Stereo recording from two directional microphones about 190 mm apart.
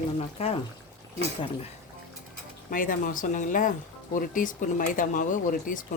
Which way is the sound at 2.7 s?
45° left (ahead or behind).